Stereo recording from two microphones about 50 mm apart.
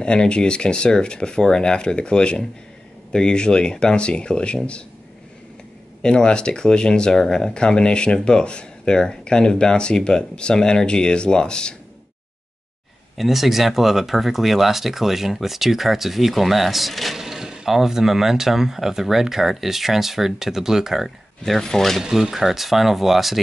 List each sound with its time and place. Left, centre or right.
0.0 s speech: centre
6.0 s speech: centre
13.2 s speech: centre
21.5 s speech: centre
22.0 s speech: centre